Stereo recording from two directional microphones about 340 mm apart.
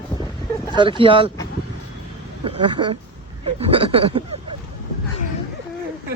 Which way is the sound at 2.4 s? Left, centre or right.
Centre.